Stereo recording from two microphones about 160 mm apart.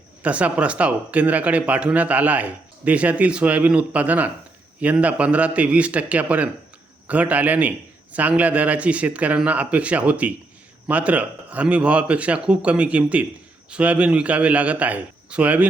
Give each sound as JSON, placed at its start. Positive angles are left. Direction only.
{"t": 0.2, "sound": "speech", "side_deg": -10}